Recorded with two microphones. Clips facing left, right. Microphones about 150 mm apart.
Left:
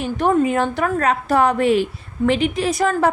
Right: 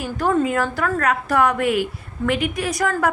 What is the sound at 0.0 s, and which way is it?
A woman's voice, 20° left (ahead or behind).